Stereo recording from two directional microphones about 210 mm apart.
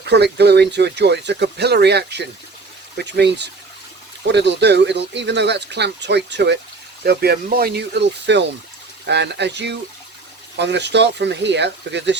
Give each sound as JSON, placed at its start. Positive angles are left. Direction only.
{"t": 0.0, "sound": "speech", "side_deg": -55}